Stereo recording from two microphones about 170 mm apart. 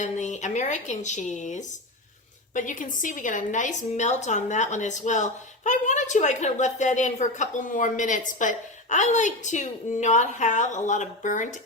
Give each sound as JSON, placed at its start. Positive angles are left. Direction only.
{"t": 0.0, "sound": "a woman's voice", "side_deg": 45}